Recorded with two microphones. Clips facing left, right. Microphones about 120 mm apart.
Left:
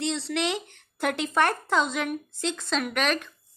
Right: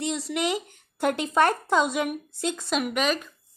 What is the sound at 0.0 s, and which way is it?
A woman's voice, 10° right (ahead or behind).